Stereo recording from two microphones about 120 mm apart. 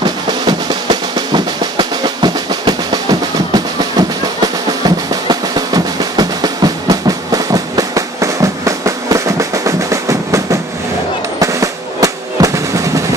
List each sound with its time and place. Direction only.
0.0 s drum: 35° right (ahead or behind)